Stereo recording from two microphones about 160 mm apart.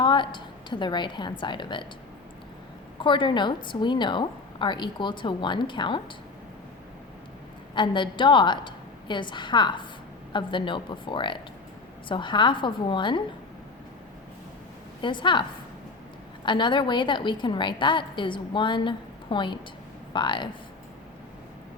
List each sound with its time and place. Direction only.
0.0 s a woman's voice: 30° left (ahead or behind)
3.0 s a woman's voice: 30° left (ahead or behind)
7.8 s a woman's voice: 30° left (ahead or behind)
15.0 s a woman's voice: 30° left (ahead or behind)
16.5 s a woman's voice: 30° left (ahead or behind)